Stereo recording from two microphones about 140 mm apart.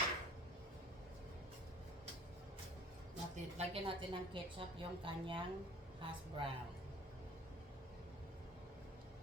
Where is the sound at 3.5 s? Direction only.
40° right (ahead or behind).